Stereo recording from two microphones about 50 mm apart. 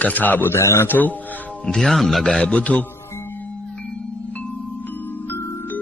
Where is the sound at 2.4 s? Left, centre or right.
Left.